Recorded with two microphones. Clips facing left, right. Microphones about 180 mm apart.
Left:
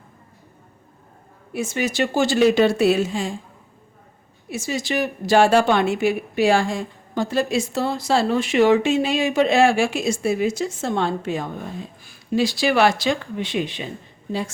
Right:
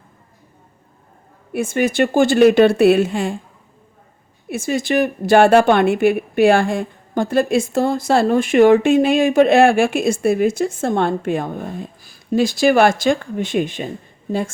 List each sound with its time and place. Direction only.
1.5 s speech: 55° right (ahead or behind)
4.4 s a woman's voice: 55° right (ahead or behind)
12.0 s a woman's voice: 45° right (ahead or behind)